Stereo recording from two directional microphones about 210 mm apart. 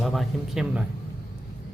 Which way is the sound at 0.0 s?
Centre (ahead or behind).